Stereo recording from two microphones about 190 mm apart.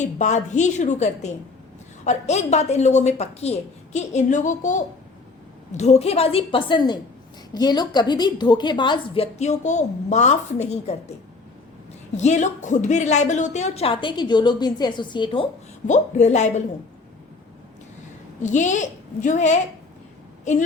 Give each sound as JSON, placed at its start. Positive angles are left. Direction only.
{"t": 0.0, "sound": "a woman's voice", "side_deg": 40}
{"t": 12.1, "sound": "a woman's voice", "side_deg": 35}
{"t": 15.9, "sound": "a woman's voice", "side_deg": 40}
{"t": 18.4, "sound": "a woman's voice", "side_deg": 40}